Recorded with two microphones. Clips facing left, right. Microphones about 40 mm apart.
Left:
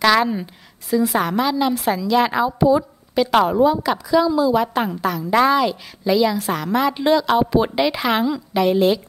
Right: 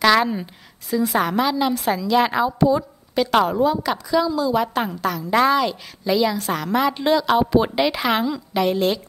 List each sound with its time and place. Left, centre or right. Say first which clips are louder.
0.0 s a woman's voice: left 1 dB; centre